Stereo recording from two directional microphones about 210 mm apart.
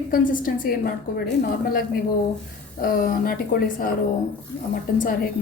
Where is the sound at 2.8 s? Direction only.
45° left (ahead or behind).